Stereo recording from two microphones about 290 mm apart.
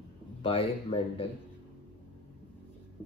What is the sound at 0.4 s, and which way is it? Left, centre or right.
Speech, centre.